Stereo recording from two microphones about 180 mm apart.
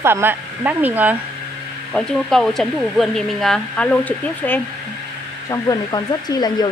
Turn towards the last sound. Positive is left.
turn(degrees=20)  # may be behind; listen again after turning